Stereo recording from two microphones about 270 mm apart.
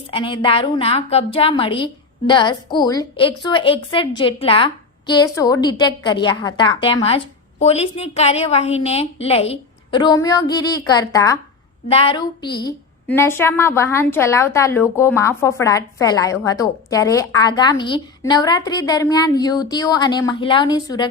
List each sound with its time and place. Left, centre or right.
0.1 s a woman's voice: centre